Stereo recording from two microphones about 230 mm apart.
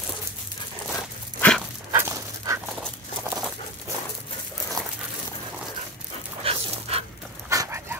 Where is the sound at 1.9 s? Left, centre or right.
Centre.